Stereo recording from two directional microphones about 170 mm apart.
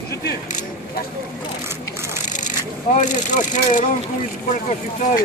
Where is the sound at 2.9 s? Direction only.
45° left (ahead or behind).